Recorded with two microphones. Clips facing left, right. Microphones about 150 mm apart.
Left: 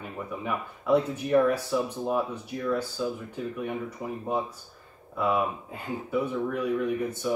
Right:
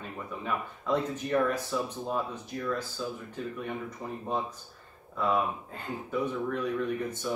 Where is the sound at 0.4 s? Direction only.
10° left (ahead or behind).